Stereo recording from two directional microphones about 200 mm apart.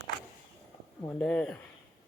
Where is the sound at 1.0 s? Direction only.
10° left (ahead or behind).